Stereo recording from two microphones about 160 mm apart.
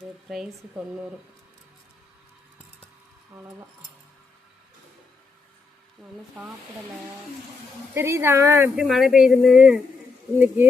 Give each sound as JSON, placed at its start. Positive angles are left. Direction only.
{"t": 0.3, "sound": "speech", "side_deg": -5}
{"t": 6.0, "sound": "speech", "side_deg": -5}
{"t": 7.9, "sound": "speech", "side_deg": -15}
{"t": 8.8, "sound": "speech", "side_deg": 0}